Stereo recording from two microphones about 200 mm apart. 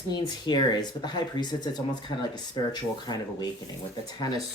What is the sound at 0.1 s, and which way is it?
Speech, 20° left (ahead or behind).